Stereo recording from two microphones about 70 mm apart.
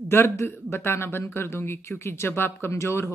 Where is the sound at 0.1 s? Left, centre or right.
Left.